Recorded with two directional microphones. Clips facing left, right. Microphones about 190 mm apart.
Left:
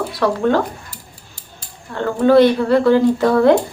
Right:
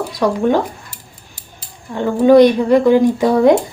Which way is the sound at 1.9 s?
15° right (ahead or behind).